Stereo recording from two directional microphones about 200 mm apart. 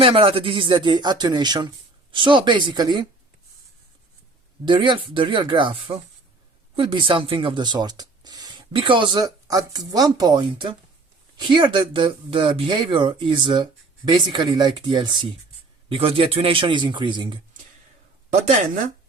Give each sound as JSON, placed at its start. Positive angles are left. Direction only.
{"t": 0.0, "sound": "speech", "side_deg": -25}
{"t": 4.6, "sound": "speech", "side_deg": -25}